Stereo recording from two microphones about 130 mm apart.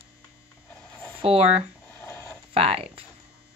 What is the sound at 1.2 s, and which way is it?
Speech, 50° right (ahead or behind).